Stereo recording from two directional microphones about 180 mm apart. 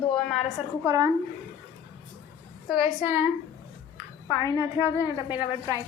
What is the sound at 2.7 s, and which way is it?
Speech, centre (ahead or behind).